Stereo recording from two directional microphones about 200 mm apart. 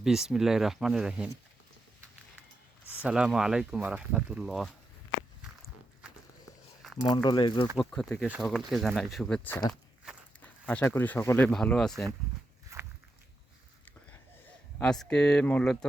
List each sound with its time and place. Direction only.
0.0 s speech: 5° right (ahead or behind)
2.9 s speech: 5° right (ahead or behind)
7.0 s speech: 20° left (ahead or behind)
7.8 s speech: centre (ahead or behind)
12.7 s walk: 15° right (ahead or behind)
14.8 s speech: 5° left (ahead or behind)